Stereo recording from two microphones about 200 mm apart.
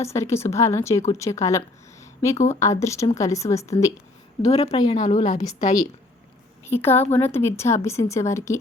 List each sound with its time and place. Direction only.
0.0 s speech: 15° left (ahead or behind)
4.4 s a woman's voice: 30° left (ahead or behind)
6.7 s speech: 10° left (ahead or behind)